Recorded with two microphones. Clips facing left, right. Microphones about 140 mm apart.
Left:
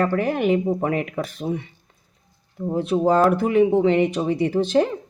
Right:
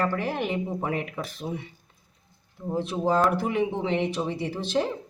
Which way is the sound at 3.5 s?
60° left (ahead or behind).